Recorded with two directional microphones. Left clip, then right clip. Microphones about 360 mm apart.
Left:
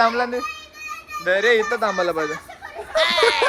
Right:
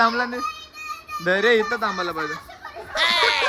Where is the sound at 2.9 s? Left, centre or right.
Centre.